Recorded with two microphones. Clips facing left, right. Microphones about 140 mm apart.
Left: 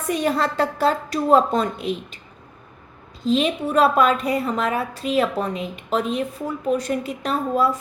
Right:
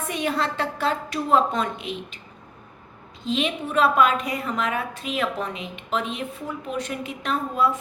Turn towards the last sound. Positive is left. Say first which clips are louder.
# left 3 dB
turn(degrees=35)  # may be behind; listen again after turning